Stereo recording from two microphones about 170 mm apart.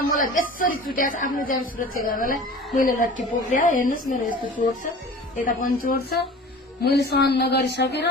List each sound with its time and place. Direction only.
0.1 s speech: 55° left (ahead or behind)
6.8 s speech: 75° left (ahead or behind)